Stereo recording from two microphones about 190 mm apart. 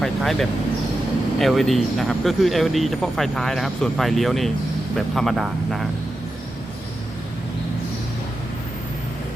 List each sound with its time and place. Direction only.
0.0 s vehicle: centre (ahead or behind)
1.4 s speech: centre (ahead or behind)